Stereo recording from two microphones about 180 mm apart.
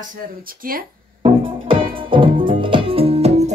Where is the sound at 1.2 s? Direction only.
30° right (ahead or behind).